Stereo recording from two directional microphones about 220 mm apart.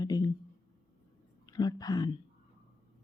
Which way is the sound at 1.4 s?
15° left (ahead or behind).